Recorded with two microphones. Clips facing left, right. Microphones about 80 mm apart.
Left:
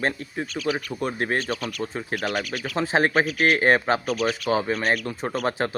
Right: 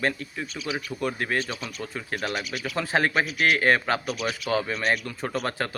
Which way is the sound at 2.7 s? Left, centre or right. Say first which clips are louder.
Left 3 dB; left.